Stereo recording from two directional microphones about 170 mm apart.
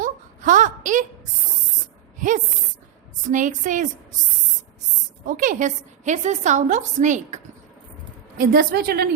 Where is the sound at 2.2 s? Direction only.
50° right (ahead or behind).